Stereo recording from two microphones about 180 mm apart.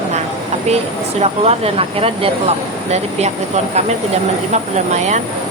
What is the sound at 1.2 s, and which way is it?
Speech, 35° right (ahead or behind).